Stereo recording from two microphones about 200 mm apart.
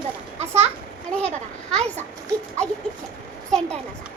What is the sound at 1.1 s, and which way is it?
Speech, 5° left (ahead or behind).